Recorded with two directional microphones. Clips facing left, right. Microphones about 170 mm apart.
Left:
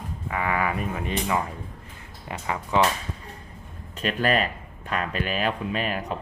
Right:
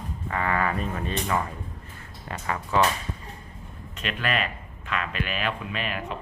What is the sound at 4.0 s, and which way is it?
A man's voice, 40° left (ahead or behind).